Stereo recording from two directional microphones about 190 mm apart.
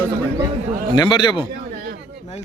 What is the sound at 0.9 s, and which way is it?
Speech, 25° left (ahead or behind).